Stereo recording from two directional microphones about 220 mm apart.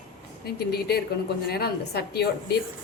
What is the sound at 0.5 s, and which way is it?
A woman's voice, 45° left (ahead or behind).